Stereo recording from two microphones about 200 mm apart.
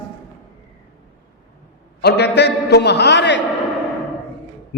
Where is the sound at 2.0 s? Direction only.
55° left (ahead or behind).